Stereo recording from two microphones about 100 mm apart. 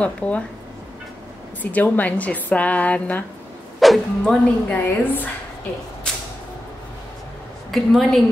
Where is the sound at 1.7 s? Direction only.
15° left (ahead or behind).